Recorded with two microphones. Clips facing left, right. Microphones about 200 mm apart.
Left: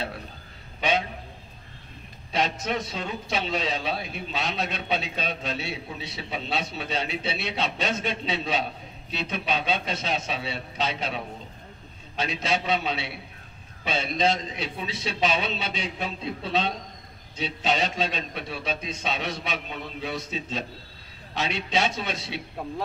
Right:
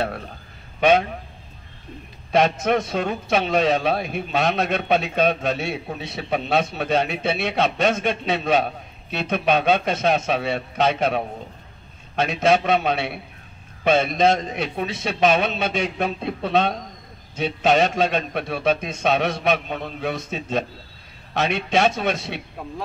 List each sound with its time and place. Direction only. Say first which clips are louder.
0.7 s a man's voice: right 9 dB; 50° right (ahead or behind)
2.3 s a man's voice: right 8 dB; 50° right (ahead or behind)